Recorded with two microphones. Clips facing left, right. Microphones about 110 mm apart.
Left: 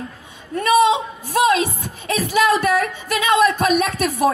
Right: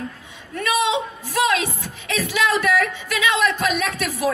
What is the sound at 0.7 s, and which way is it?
Speech, 40° left (ahead or behind).